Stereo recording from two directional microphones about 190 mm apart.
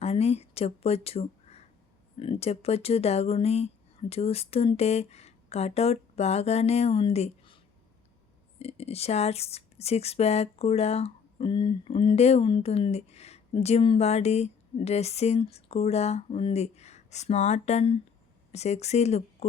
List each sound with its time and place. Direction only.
0.0 s speech: 35° left (ahead or behind)